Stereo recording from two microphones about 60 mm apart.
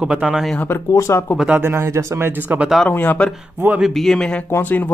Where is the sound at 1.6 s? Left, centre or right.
Right.